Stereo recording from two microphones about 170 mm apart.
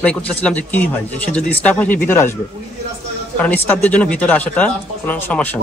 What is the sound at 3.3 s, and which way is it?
Speech, 10° left (ahead or behind).